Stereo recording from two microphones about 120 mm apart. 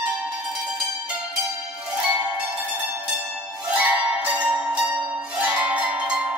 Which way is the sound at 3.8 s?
15° right (ahead or behind).